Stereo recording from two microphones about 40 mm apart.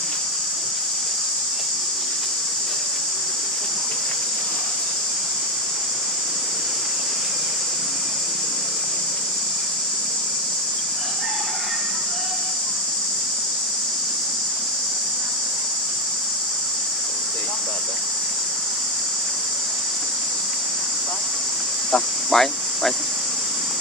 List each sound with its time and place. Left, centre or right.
21.9 s cricket: centre